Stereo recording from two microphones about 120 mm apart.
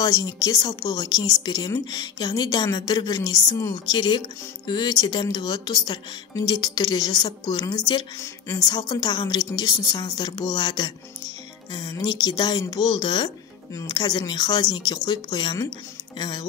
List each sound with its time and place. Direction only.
0.0 s a woman's voice: 30° left (ahead or behind)